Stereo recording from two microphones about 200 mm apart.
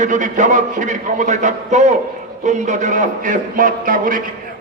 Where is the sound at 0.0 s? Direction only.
40° right (ahead or behind).